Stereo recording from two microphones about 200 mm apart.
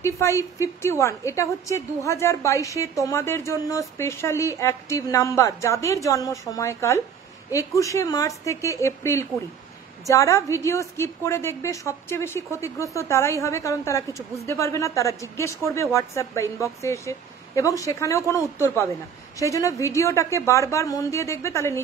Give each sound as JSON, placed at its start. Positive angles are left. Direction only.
{"t": 0.0, "sound": "a woman's voice", "side_deg": 15}